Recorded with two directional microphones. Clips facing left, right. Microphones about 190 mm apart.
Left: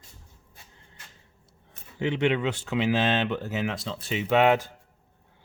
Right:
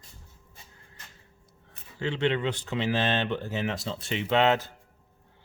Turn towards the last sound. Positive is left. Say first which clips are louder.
# left 2 dB
turn(degrees=10)  # may be behind; listen again after turning